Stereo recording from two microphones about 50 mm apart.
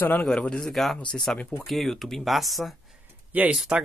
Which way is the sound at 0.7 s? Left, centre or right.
Centre.